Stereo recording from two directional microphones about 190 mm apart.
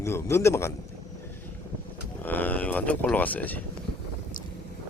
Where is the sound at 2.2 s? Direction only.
10° left (ahead or behind).